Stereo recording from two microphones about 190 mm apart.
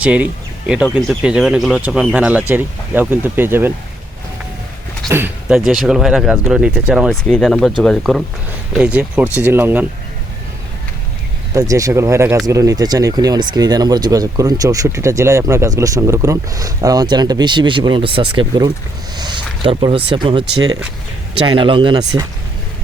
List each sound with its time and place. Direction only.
0.0 s speech: 5° right (ahead or behind)
5.0 s speech: 10° right (ahead or behind)
11.5 s speech: 15° right (ahead or behind)